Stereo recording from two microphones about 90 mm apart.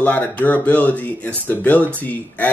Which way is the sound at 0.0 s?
15° left (ahead or behind).